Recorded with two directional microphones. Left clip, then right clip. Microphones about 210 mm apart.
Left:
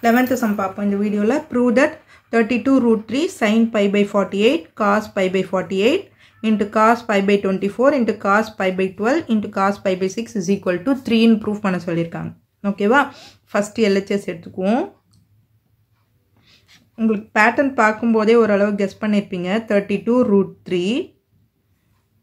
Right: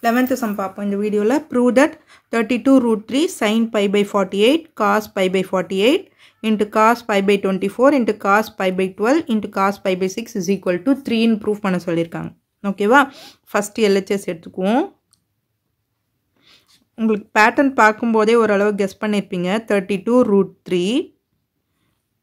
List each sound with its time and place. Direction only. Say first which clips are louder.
0.0 s speech: left 1 dB; 30° right (ahead or behind)
16.4 s speech: even; 40° right (ahead or behind)